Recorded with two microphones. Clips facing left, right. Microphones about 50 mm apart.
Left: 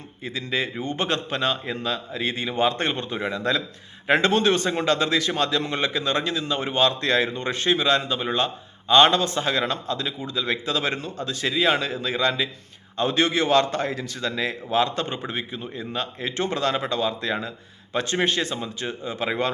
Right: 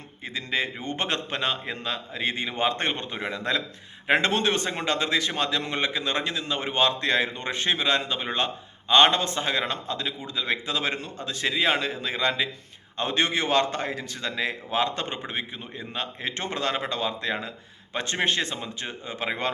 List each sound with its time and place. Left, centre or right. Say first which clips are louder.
0.3 s a man's voice: left 1 dB; right